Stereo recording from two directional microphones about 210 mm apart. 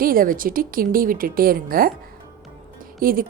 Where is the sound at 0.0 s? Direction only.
45° right (ahead or behind).